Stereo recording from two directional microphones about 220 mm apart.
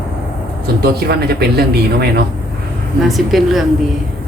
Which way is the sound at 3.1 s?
Centre (ahead or behind).